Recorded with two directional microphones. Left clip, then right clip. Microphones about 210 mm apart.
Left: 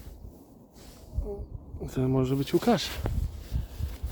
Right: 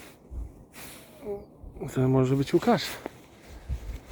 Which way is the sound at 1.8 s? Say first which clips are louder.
Right 3 dB; centre (ahead or behind).